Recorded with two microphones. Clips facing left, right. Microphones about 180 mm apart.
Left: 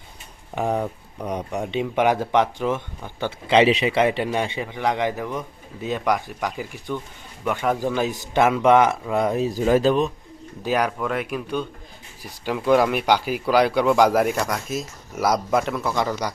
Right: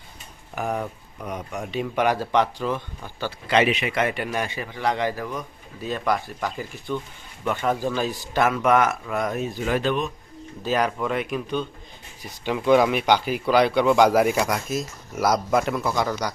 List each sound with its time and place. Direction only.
0.5 s speech: 30° left (ahead or behind)
10.6 s speech: 10° left (ahead or behind)